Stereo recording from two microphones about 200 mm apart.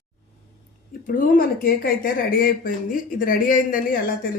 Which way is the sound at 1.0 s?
45° left (ahead or behind).